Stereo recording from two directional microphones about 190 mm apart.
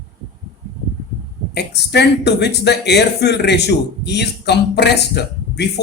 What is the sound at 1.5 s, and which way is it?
Speech, 60° left (ahead or behind).